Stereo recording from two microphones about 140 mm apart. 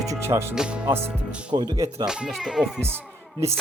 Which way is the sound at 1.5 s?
30° right (ahead or behind).